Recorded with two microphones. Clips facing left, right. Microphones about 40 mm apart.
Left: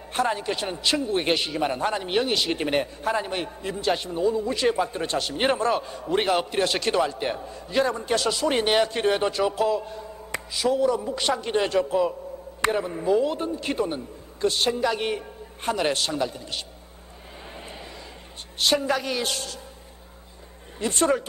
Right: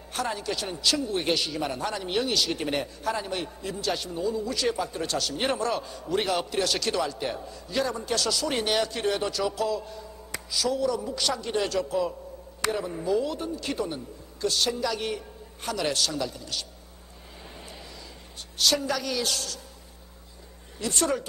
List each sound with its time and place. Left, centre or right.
0.1 s a man's voice: left
18.6 s a man's voice: left
20.8 s a man's voice: left